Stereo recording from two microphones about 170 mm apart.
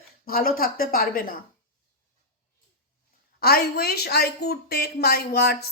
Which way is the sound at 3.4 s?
65° left (ahead or behind).